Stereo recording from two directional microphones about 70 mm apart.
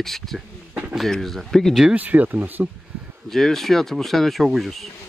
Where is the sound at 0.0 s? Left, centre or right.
Centre.